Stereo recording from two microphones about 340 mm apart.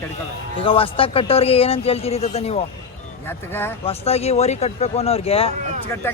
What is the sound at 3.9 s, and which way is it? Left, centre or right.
Speech, centre.